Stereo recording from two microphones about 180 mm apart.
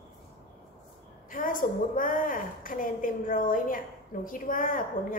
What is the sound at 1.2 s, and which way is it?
A woman's voice, 50° left (ahead or behind).